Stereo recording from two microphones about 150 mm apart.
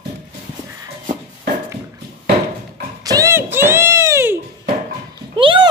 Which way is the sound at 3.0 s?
20° right (ahead or behind).